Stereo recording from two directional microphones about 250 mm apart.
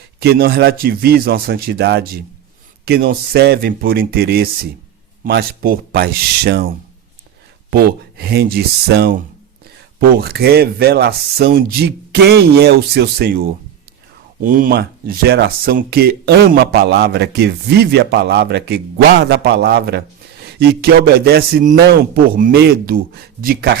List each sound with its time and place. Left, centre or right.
0.2 s speech: right
7.7 s speech: right
14.4 s speech: right